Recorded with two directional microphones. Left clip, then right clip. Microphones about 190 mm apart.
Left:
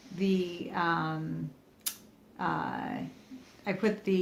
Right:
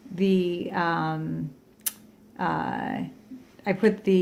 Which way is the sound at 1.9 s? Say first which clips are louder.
Right 3 dB; 50° right (ahead or behind).